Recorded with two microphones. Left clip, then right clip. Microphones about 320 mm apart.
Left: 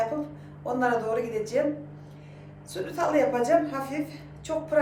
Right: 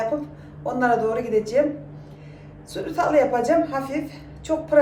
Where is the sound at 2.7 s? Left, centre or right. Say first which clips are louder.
Right 6 dB; centre.